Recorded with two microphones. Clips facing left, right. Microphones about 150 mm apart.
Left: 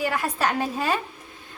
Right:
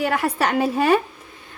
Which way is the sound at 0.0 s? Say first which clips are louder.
Right 4 dB; 70° right (ahead or behind).